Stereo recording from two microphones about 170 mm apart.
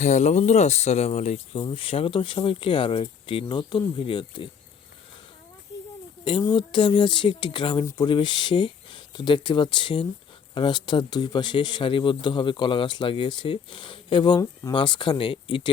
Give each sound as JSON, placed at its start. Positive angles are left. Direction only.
{"t": 0.0, "sound": "speech", "side_deg": 45}
{"t": 6.2, "sound": "speech", "side_deg": 25}